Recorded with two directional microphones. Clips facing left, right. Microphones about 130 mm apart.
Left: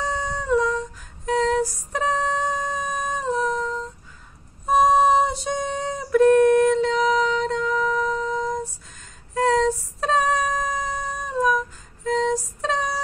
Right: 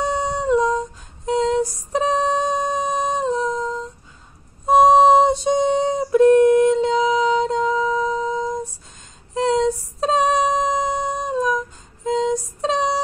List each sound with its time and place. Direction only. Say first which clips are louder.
0.0 s dog: right 5 dB; 25° right (ahead or behind)
4.6 s a sound: right 5 dB; 20° right (ahead or behind)
9.3 s music: right 1 dB; 20° right (ahead or behind)